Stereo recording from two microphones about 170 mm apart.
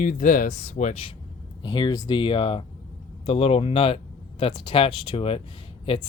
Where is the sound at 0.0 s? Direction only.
50° left (ahead or behind).